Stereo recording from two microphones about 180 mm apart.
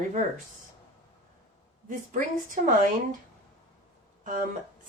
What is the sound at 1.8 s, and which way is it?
Speech, 45° right (ahead or behind).